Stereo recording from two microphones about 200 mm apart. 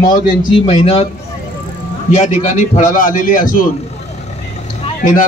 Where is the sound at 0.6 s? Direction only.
30° left (ahead or behind).